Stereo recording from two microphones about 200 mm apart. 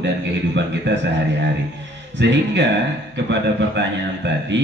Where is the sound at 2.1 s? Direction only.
60° right (ahead or behind).